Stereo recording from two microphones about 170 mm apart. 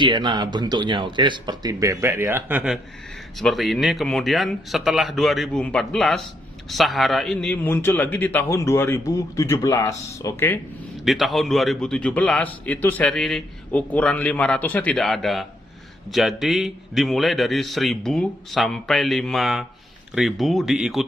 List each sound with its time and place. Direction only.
0.0 s a man's voice: 30° right (ahead or behind); by 10.6 s 15° left (ahead or behind)
11.0 s a man's voice: centre (ahead or behind)